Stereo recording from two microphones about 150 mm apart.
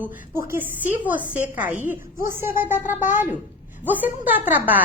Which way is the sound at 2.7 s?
55° left (ahead or behind).